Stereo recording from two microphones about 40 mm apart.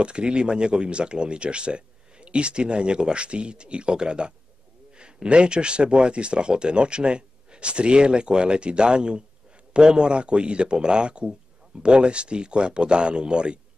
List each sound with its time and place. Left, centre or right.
0.0 s speech: right